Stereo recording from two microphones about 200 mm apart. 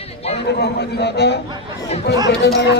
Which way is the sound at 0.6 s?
55° left (ahead or behind).